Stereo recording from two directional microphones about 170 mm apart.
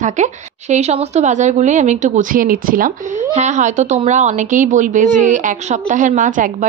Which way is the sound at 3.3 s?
45° right (ahead or behind).